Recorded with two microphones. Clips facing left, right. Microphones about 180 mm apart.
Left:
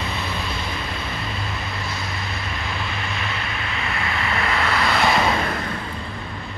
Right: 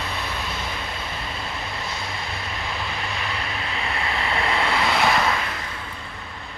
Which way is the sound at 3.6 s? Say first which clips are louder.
Even; 30° right (ahead or behind).